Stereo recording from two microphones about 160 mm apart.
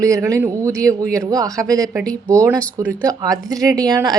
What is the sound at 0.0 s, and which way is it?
Speech, 20° right (ahead or behind).